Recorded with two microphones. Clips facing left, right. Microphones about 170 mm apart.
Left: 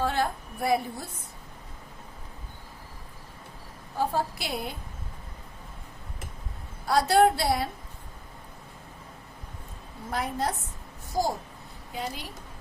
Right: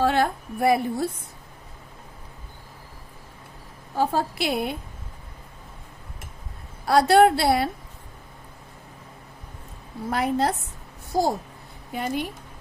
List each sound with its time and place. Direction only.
0.0 s a woman's voice: 70° right (ahead or behind)
3.9 s a woman's voice: 70° right (ahead or behind)
6.8 s a woman's voice: 70° right (ahead or behind)
10.1 s a woman's voice: 70° right (ahead or behind)
11.9 s a woman's voice: 60° right (ahead or behind)